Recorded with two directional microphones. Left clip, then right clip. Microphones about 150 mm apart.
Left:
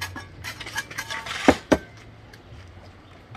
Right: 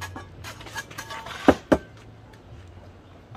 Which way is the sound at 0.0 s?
15° left (ahead or behind).